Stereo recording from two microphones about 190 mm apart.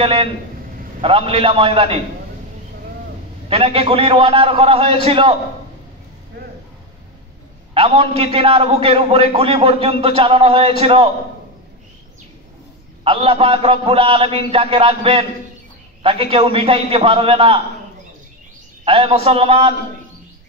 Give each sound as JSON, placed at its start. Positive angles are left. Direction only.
{"t": 0.0, "sound": "a man's voice", "side_deg": -30}
{"t": 3.4, "sound": "a man's voice", "side_deg": -30}
{"t": 7.7, "sound": "a man's voice", "side_deg": -30}
{"t": 13.0, "sound": "a man's voice", "side_deg": -30}
{"t": 18.9, "sound": "a man's voice", "side_deg": -30}